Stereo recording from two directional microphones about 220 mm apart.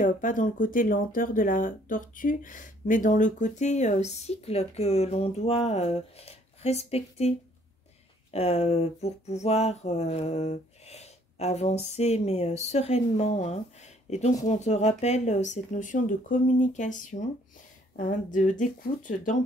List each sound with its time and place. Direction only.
0.0 s speech: 35° left (ahead or behind)
8.3 s a sound: 30° left (ahead or behind)
11.9 s speech: 30° left (ahead or behind)